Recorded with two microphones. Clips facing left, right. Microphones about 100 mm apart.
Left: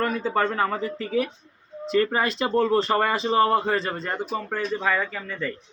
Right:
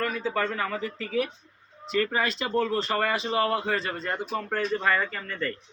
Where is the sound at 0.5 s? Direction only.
35° left (ahead or behind).